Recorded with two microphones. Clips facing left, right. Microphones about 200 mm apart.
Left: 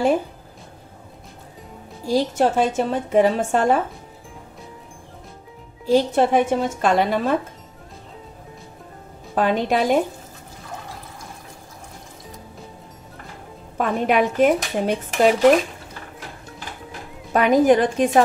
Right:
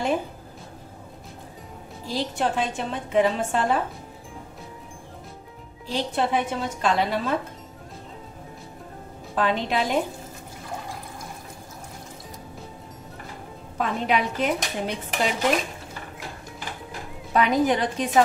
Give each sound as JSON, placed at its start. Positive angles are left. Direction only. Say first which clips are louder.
{"t": 2.0, "sound": "a woman's voice", "louder": "left 7 dB", "side_deg": 45}
{"t": 5.9, "sound": "a woman's voice", "louder": "left 8 dB", "side_deg": 45}
{"t": 9.3, "sound": "a woman's voice", "louder": "left 5 dB", "side_deg": 45}
{"t": 13.7, "sound": "a woman's voice", "louder": "left 5 dB", "side_deg": 50}
{"t": 17.3, "sound": "a woman's voice", "louder": "left 6 dB", "side_deg": 50}